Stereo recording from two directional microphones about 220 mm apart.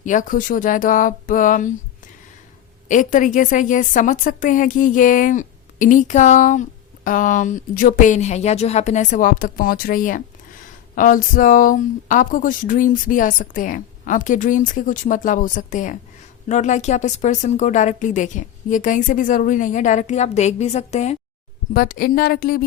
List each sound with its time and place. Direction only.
0.0 s a woman's voice: 35° left (ahead or behind)
2.9 s a woman's voice: 35° left (ahead or behind)
21.7 s a woman's voice: 40° left (ahead or behind)